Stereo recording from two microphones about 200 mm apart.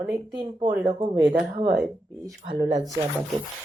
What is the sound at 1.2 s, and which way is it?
Speech, 5° right (ahead or behind).